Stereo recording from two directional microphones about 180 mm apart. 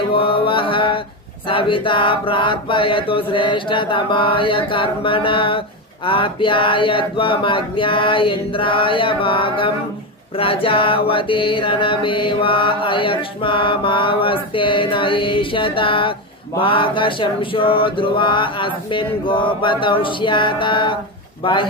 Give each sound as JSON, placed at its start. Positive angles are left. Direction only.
{"t": 0.1, "sound": "mantra", "side_deg": 30}